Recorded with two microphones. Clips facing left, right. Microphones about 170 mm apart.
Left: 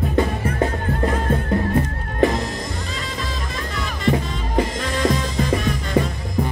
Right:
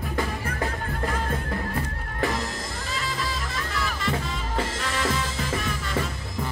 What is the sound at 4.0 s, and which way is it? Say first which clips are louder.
Music: left 7 dB; 20° left (ahead or behind).